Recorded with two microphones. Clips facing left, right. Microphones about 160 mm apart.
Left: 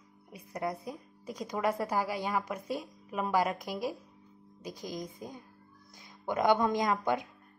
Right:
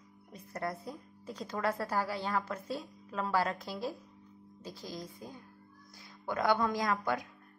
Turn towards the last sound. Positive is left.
turn(degrees=20)  # may be behind; listen again after turning